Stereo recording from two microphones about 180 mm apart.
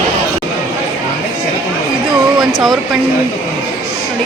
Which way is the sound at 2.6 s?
Centre (ahead or behind).